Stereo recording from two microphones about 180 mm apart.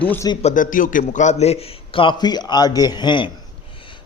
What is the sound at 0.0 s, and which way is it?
Speech, 10° left (ahead or behind).